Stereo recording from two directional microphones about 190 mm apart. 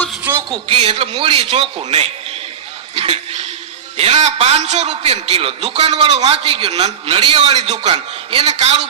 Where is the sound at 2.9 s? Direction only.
30° right (ahead or behind).